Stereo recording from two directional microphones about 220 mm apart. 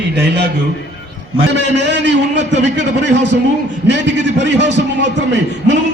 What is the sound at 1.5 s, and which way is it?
A man's voice, 50° right (ahead or behind).